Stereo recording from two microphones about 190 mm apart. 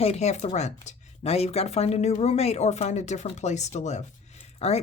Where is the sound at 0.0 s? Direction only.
35° left (ahead or behind).